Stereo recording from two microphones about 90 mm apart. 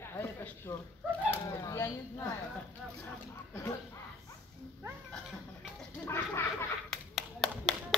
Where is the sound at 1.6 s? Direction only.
35° left (ahead or behind).